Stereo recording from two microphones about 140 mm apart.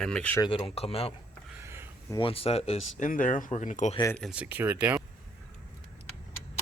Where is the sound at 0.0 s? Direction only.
5° left (ahead or behind).